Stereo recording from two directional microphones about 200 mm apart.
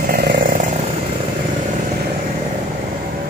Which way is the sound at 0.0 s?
50° right (ahead or behind).